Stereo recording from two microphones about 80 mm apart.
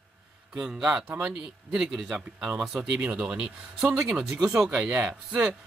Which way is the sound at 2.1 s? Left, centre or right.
Centre.